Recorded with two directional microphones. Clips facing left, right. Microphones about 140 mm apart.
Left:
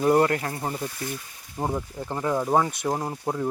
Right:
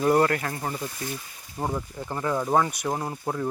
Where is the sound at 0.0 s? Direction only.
20° left (ahead or behind).